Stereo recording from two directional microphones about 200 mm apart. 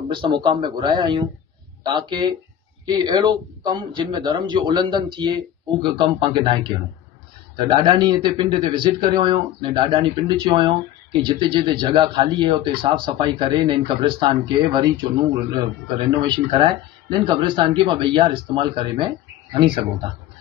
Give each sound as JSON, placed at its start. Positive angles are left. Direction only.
{"t": 0.1, "sound": "a man's voice", "side_deg": -25}